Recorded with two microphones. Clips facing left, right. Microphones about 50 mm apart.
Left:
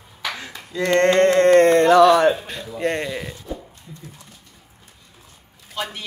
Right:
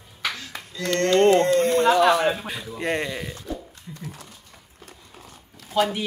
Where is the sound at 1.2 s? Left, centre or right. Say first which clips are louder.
Left 3 dB; left.